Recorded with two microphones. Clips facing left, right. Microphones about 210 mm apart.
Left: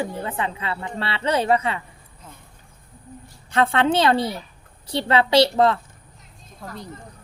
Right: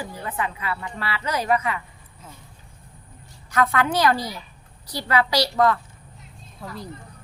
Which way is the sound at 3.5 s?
30° left (ahead or behind).